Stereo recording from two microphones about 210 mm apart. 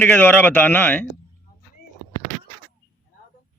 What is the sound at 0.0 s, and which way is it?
Speech, 10° left (ahead or behind).